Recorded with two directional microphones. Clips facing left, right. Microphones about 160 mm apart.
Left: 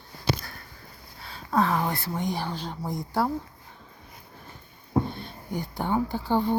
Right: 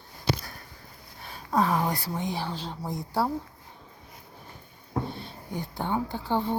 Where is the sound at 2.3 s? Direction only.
Centre (ahead or behind).